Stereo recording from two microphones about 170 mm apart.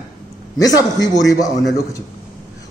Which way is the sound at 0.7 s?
20° left (ahead or behind).